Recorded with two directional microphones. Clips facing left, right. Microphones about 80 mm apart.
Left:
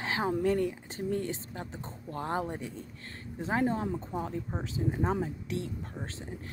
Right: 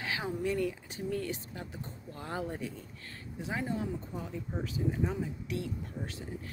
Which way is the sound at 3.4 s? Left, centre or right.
Left.